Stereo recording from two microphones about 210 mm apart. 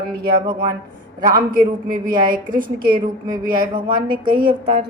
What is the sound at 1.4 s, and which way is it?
A woman's voice, 40° right (ahead or behind).